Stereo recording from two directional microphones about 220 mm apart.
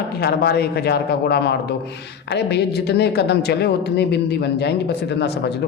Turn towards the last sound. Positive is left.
turn(degrees=50)  # may be behind; listen again after turning